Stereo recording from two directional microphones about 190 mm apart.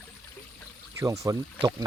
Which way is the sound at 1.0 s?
15° right (ahead or behind).